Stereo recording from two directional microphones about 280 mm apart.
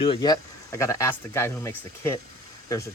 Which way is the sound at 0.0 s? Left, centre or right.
Centre.